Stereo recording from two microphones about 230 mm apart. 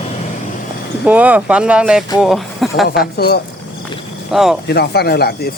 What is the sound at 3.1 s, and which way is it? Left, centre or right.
Speech, left.